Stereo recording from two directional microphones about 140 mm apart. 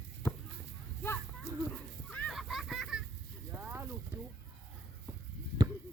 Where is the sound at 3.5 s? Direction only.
15° right (ahead or behind).